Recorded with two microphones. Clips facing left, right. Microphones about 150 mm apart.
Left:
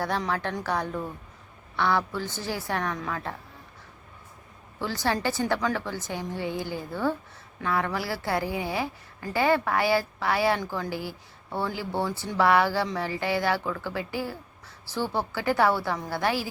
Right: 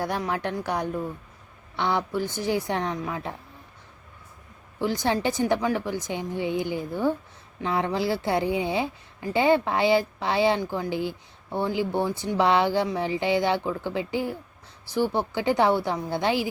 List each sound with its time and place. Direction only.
0.0 s a woman's voice: 15° right (ahead or behind)
4.8 s a woman's voice: 15° right (ahead or behind)